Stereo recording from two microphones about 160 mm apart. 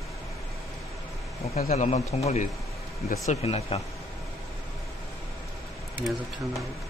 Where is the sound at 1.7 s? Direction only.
45° left (ahead or behind).